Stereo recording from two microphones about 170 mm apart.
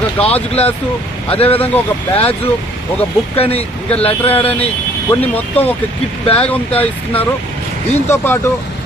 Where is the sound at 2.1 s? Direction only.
35° left (ahead or behind).